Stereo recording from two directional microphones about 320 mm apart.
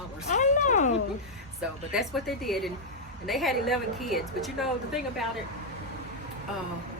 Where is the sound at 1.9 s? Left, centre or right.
Centre.